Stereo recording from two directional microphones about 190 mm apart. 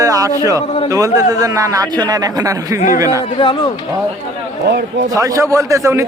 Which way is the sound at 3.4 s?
25° left (ahead or behind).